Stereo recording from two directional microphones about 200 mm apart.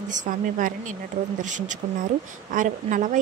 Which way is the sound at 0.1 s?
40° right (ahead or behind).